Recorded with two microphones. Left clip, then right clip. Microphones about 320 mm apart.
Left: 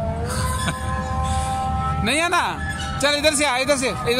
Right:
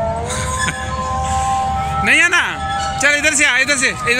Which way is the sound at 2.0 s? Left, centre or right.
Centre.